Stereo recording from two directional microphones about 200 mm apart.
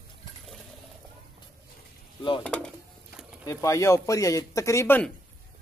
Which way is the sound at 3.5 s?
15° left (ahead or behind).